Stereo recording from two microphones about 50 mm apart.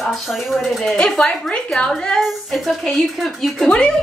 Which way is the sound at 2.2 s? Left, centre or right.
Centre.